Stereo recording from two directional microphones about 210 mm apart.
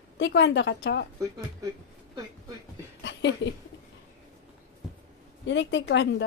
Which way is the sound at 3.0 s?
60° left (ahead or behind).